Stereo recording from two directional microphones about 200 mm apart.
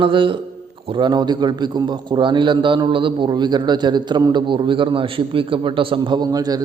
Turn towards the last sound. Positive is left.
turn(degrees=-20)  # may be behind; listen again after turning